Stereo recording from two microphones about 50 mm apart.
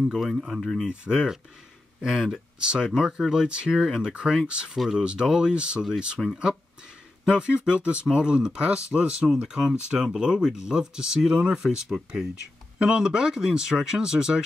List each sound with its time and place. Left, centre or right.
0.1 s speech: centre
0.8 s speech: centre
2.6 s speech: centre
7.2 s speech: centre